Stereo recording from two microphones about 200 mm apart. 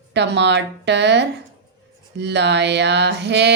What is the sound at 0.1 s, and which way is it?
Speech, 60° right (ahead or behind).